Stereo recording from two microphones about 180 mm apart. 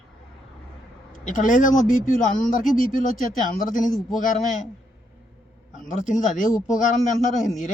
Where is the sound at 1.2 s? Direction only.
45° left (ahead or behind).